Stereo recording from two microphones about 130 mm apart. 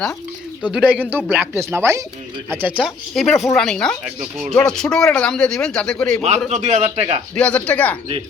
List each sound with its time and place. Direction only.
0.7 s speech: 10° right (ahead or behind)
2.8 s speech: centre (ahead or behind)
6.5 s a man's voice: 65° right (ahead or behind)
7.3 s speech: 10° left (ahead or behind)